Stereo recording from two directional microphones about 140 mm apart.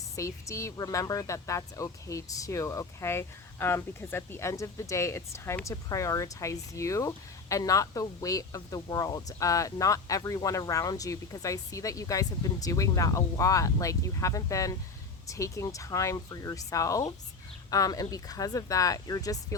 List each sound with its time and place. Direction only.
0.2 s speech: 20° left (ahead or behind)